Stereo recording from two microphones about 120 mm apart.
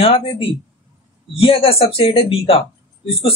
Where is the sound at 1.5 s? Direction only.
50° left (ahead or behind).